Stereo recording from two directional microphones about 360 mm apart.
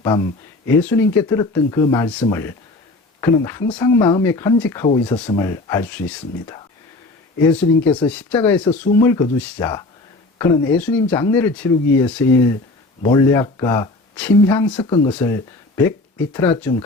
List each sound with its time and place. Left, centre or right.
0.0 s speech: centre